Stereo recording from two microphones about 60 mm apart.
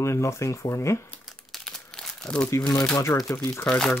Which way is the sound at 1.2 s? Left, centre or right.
Centre.